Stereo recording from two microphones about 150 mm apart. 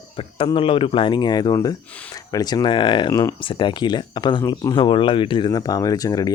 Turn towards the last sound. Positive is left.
turn(degrees=25)  # may be behind; listen again after turning